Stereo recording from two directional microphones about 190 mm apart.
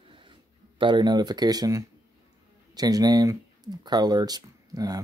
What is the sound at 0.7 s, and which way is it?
Speech, 25° right (ahead or behind).